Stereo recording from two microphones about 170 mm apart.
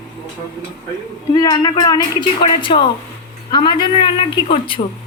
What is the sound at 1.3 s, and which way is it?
A woman's voice, 25° left (ahead or behind).